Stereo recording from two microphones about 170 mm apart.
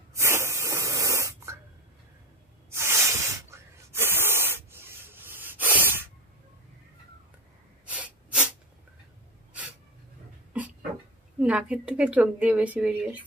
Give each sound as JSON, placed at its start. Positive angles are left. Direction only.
{"t": 0.1, "sound": "spray", "side_deg": -15}
{"t": 2.7, "sound": "a sound", "side_deg": -15}
{"t": 7.8, "sound": "sneeze", "side_deg": -10}
{"t": 11.3, "sound": "speech", "side_deg": -5}